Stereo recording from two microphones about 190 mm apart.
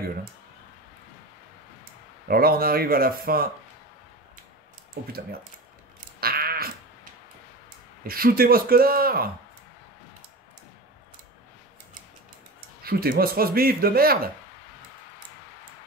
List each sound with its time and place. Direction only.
2.2 s speech: 50° right (ahead or behind)
6.2 s a sound: 50° right (ahead or behind)
8.1 s speech: 50° right (ahead or behind)
12.5 s speech: 50° right (ahead or behind)